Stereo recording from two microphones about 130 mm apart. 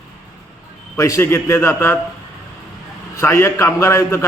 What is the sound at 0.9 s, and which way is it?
A man's voice, 25° left (ahead or behind).